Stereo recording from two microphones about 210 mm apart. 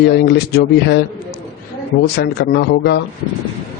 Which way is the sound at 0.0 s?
50° left (ahead or behind).